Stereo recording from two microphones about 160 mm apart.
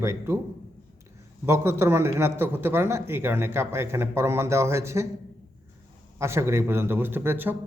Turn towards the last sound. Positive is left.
turn(degrees=-10)  # may be behind; listen again after turning